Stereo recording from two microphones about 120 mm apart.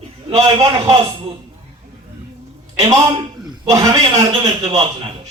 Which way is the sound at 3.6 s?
30° right (ahead or behind).